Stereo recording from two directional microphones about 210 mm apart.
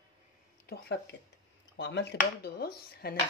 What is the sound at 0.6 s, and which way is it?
Speech, 50° left (ahead or behind).